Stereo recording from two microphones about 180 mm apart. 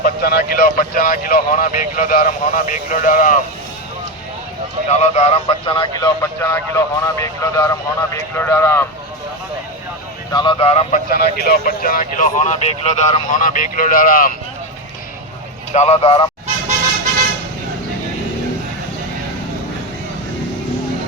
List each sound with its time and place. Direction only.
0.0 s speech: 60° left (ahead or behind)
4.9 s speech: 40° left (ahead or behind)
6.0 s a man's voice: 15° left (ahead or behind)
10.3 s speech: 30° left (ahead or behind)
11.1 s speech: 60° left (ahead or behind)
15.7 s speech: 40° left (ahead or behind)